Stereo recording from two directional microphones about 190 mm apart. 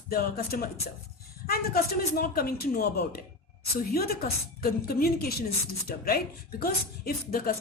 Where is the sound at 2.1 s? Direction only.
50° left (ahead or behind).